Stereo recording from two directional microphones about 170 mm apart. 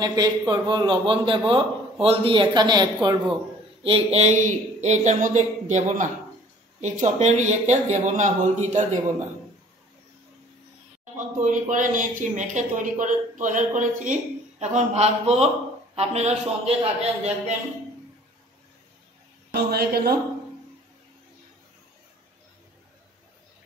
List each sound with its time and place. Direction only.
0.0 s speech: 20° right (ahead or behind)
3.8 s speech: 35° right (ahead or behind)
11.1 s speech: 50° right (ahead or behind)
19.5 s a woman's voice: 65° right (ahead or behind)